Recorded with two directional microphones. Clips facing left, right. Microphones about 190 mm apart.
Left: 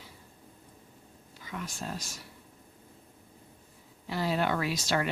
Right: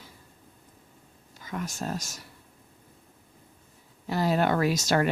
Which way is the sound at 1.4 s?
45° right (ahead or behind).